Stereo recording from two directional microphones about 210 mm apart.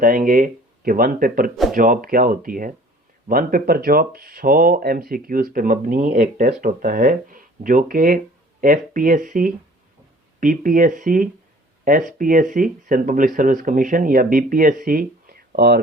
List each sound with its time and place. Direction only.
0.0 s speech: 40° right (ahead or behind)